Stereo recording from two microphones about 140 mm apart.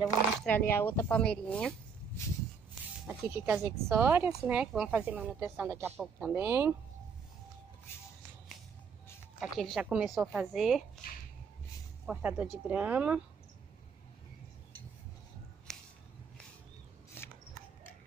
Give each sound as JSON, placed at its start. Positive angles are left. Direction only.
{"t": 0.5, "sound": "speech", "side_deg": 15}
{"t": 2.7, "sound": "speech", "side_deg": -15}
{"t": 9.4, "sound": "a woman's voice", "side_deg": -5}
{"t": 12.1, "sound": "speech", "side_deg": -10}
{"t": 15.7, "sound": "a sound", "side_deg": 5}
{"t": 17.2, "sound": "a sound", "side_deg": 15}